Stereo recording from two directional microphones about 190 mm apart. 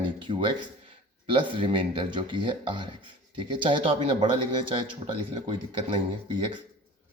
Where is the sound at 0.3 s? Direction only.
25° right (ahead or behind).